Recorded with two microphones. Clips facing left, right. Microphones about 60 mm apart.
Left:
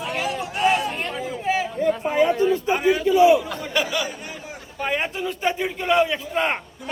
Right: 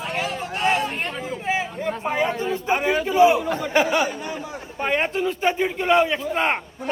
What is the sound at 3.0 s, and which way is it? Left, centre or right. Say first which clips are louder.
Speech: left 1 dB; right.